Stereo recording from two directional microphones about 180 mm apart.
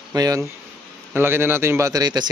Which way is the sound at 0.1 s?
20° right (ahead or behind).